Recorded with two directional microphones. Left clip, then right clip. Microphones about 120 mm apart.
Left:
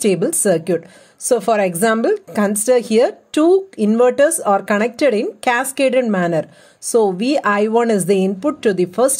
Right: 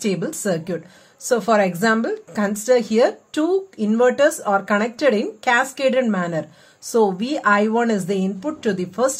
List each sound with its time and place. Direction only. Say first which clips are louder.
0.0 s a woman's voice: left 7 dB; 65° left (ahead or behind)